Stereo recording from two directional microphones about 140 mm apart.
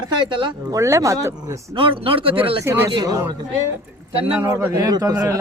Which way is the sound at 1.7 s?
40° right (ahead or behind).